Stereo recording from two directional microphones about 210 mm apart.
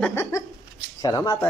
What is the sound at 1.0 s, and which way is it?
Speech, 20° left (ahead or behind).